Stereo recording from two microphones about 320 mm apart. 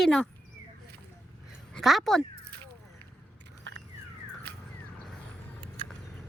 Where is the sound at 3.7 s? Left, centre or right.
Right.